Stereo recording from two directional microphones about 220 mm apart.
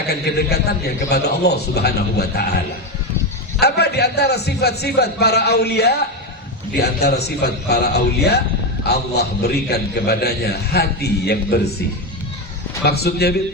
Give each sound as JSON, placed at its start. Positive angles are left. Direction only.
{"t": 0.1, "sound": "a man's voice", "side_deg": 50}
{"t": 3.6, "sound": "a man's voice", "side_deg": 50}
{"t": 12.8, "sound": "a man's voice", "side_deg": 45}